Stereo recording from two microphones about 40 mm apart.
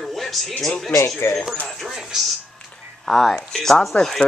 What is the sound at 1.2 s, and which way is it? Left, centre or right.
Speech, left.